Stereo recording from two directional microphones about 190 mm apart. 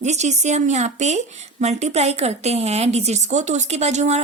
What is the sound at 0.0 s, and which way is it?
Speech, 35° right (ahead or behind).